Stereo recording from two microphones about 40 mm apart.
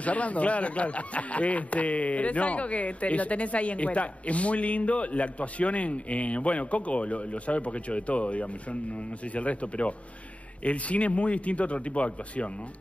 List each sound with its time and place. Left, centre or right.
0.0 s speech: left